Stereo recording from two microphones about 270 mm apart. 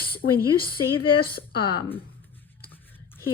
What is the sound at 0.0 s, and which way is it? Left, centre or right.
Speech, left.